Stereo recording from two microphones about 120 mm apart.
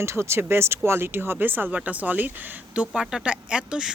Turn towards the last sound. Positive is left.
turn(degrees=-5)  # may be behind; listen again after turning